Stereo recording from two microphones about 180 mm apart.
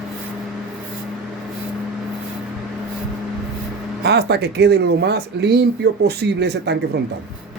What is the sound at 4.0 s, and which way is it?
Speech, 65° right (ahead or behind).